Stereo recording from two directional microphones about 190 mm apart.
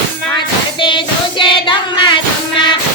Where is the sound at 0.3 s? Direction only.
25° left (ahead or behind).